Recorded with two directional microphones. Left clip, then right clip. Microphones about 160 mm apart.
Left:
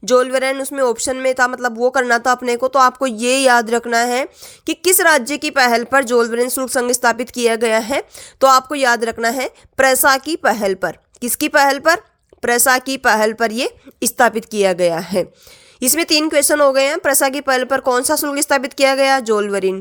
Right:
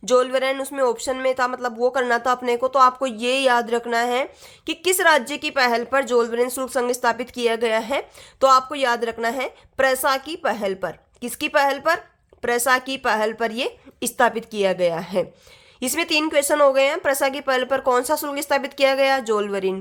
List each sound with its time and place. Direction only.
0.0 s speech: 30° left (ahead or behind)